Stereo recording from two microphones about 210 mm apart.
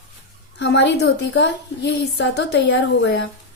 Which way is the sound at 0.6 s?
55° left (ahead or behind).